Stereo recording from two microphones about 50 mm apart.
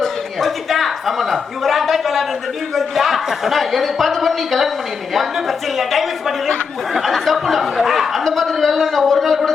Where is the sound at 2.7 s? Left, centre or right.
Centre.